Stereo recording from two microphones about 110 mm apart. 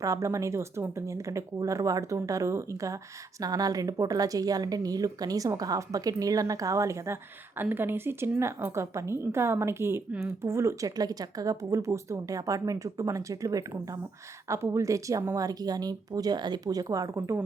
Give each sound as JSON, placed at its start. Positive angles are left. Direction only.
{"t": 0.0, "sound": "a woman's voice", "side_deg": -30}